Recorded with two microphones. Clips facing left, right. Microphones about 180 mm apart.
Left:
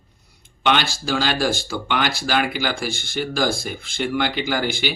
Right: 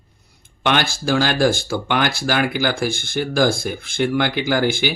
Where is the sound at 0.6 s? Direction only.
50° right (ahead or behind).